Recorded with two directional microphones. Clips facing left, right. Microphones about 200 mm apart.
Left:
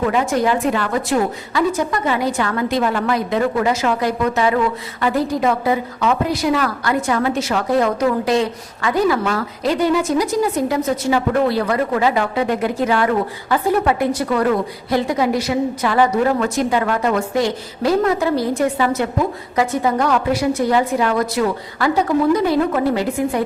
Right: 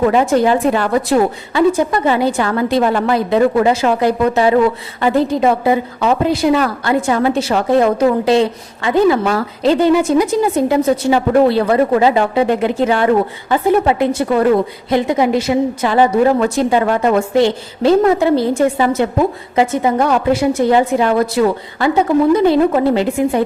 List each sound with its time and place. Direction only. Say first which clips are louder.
0.0 s a woman's voice: right 5 dB; 35° right (ahead or behind)